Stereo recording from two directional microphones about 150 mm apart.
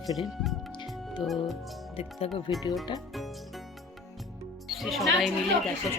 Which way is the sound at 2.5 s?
35° left (ahead or behind).